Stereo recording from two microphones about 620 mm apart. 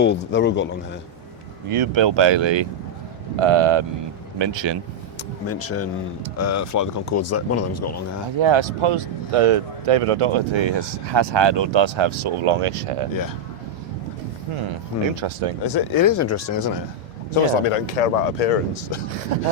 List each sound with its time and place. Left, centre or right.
0.0 s speech: centre
1.7 s speech: right
5.5 s speech: left
8.4 s speech: right
15.1 s speech: right
15.6 s speech: left
17.3 s a man's voice: left